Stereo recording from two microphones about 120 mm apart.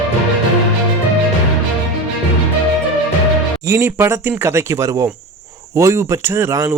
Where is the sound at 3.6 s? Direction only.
20° right (ahead or behind).